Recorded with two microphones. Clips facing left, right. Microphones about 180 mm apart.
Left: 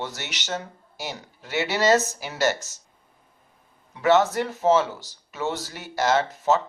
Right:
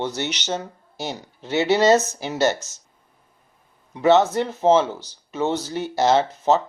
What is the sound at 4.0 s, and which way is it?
Speech, 20° right (ahead or behind).